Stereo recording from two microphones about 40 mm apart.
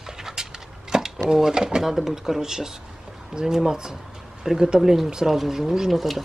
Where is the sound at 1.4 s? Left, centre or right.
Centre.